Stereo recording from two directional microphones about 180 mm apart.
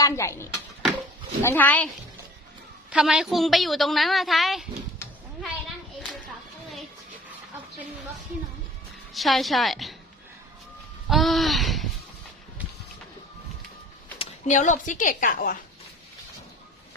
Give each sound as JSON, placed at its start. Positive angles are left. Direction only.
{"t": 0.0, "sound": "a child's voice", "side_deg": 15}
{"t": 2.9, "sound": "a woman's voice", "side_deg": -5}
{"t": 9.1, "sound": "a woman's voice", "side_deg": 0}
{"t": 11.1, "sound": "a sound", "side_deg": 0}
{"t": 14.2, "sound": "speech", "side_deg": 45}